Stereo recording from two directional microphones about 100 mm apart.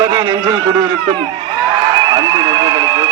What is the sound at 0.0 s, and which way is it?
A man's voice, 45° right (ahead or behind).